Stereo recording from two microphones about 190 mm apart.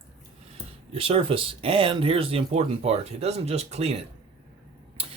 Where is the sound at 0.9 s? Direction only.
30° right (ahead or behind).